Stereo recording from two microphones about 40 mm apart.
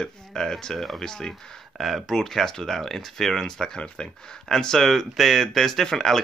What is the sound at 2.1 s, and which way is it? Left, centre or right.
Speech, centre.